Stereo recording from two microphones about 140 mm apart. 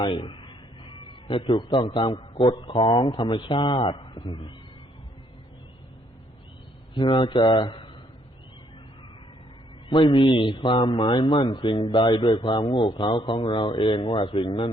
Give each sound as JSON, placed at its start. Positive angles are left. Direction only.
{"t": 0.0, "sound": "a man's voice", "side_deg": 35}
{"t": 6.9, "sound": "a man's voice", "side_deg": 35}
{"t": 9.9, "sound": "a man's voice", "side_deg": 35}